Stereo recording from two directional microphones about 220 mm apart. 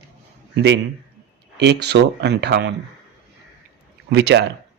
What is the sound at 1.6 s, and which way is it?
A man's voice, 50° right (ahead or behind).